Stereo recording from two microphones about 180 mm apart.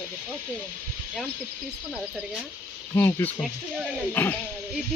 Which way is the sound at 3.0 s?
15° left (ahead or behind).